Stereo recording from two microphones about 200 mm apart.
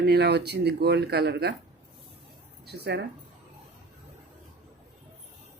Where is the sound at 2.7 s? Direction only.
55° right (ahead or behind).